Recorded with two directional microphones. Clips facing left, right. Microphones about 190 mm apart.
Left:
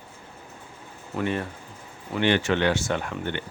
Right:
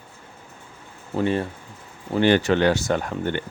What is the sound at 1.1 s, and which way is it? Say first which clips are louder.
Speech: right 5 dB; 30° right (ahead or behind).